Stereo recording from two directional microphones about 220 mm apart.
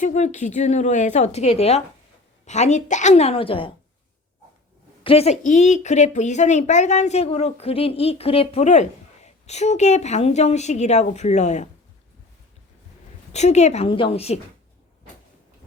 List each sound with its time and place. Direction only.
0.0 s a woman's voice: 30° left (ahead or behind)
5.0 s a woman's voice: 30° left (ahead or behind)
13.3 s a woman's voice: 30° left (ahead or behind)